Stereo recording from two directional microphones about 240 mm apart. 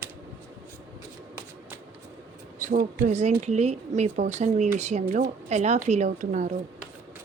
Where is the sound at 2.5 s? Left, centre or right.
Right.